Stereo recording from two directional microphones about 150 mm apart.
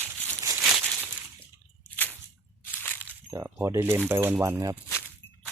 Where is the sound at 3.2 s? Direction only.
15° right (ahead or behind).